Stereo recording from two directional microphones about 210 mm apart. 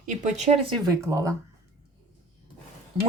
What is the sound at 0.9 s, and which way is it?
Speech, 15° right (ahead or behind).